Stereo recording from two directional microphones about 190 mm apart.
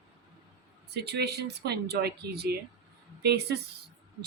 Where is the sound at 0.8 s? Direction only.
60° right (ahead or behind).